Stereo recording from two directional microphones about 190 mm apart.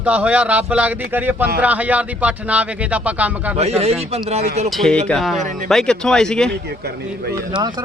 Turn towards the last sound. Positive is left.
turn(degrees=5)  # may be behind; listen again after turning